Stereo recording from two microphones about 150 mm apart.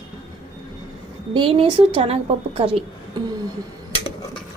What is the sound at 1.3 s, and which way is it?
A woman's voice, 35° right (ahead or behind).